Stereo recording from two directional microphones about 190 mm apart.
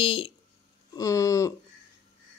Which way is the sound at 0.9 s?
15° left (ahead or behind).